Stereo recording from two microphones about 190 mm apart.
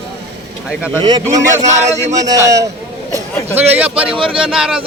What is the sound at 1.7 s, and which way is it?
Speech, 40° right (ahead or behind).